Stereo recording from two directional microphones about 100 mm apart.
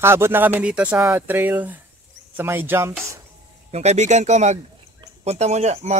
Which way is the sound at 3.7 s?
90° right.